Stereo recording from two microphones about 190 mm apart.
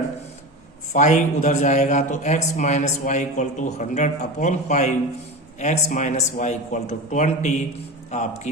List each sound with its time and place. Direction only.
0.9 s a man's voice: 40° left (ahead or behind)